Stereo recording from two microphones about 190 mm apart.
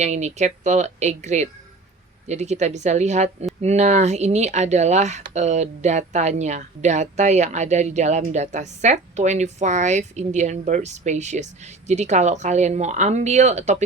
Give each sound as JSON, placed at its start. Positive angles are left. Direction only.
{"t": 0.0, "sound": "speech", "side_deg": -35}